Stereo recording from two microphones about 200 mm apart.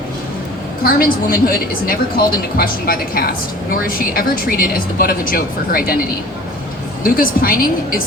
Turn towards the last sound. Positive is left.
turn(degrees=45)  # may be behind; listen again after turning